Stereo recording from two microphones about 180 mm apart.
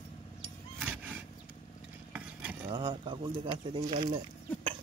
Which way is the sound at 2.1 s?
10° right (ahead or behind).